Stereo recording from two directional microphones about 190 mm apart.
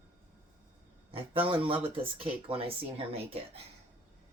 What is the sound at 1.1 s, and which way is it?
Speech, 30° right (ahead or behind).